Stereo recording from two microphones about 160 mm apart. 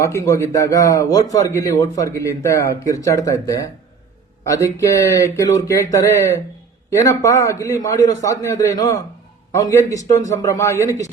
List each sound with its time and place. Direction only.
0.0 s a man's voice: 20° left (ahead or behind)